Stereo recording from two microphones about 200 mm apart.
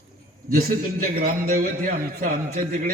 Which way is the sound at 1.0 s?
45° right (ahead or behind).